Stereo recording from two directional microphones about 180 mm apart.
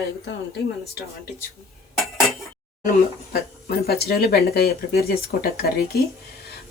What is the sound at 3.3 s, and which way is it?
Speech, 60° left (ahead or behind).